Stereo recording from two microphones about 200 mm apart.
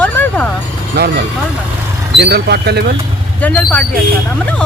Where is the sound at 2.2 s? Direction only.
55° right (ahead or behind).